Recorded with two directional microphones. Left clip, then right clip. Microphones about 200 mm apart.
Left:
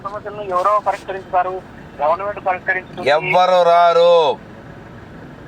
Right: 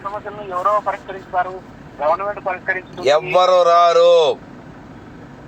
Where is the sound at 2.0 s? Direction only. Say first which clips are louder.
Even; 15° left (ahead or behind).